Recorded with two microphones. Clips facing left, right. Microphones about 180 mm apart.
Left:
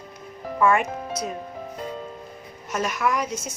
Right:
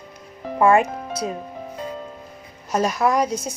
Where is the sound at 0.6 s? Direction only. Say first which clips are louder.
Right 4 dB; 30° right (ahead or behind).